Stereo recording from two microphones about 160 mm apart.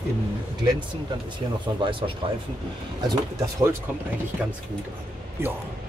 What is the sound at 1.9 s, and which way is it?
Speech, 30° right (ahead or behind).